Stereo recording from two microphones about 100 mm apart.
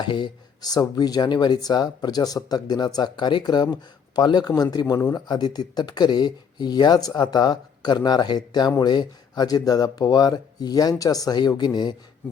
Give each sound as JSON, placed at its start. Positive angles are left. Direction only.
{"t": 0.1, "sound": "speech", "side_deg": 45}